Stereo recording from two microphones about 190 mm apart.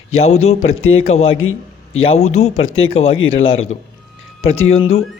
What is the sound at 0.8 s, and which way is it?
A man's voice, 90° left.